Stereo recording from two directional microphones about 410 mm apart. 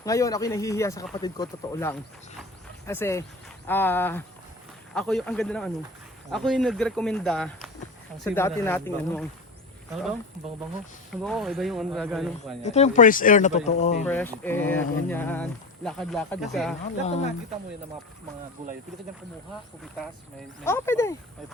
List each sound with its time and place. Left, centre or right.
0.0 s speech: centre
2.4 s cricket: centre
3.7 s speech: centre
12.6 s speech: centre
14.1 s speech: centre
17.0 s speech: centre
20.7 s speech: centre